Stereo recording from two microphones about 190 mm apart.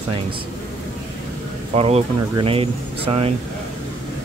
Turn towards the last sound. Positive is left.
turn(degrees=-30)  # may be behind; listen again after turning